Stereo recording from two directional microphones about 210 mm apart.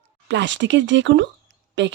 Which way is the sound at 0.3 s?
60° right (ahead or behind).